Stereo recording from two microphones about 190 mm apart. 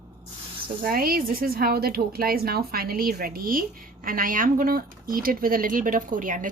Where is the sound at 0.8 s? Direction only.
50° right (ahead or behind).